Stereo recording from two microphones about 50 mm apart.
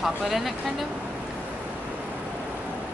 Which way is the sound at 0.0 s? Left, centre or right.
Centre.